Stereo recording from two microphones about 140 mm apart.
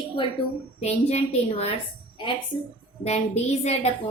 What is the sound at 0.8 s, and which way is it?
A woman's voice, 50° left (ahead or behind).